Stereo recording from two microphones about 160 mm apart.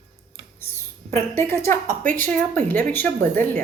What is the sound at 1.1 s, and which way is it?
A woman's voice, 15° left (ahead or behind).